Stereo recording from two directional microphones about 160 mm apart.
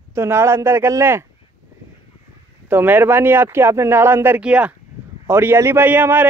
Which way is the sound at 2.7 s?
10° right (ahead or behind).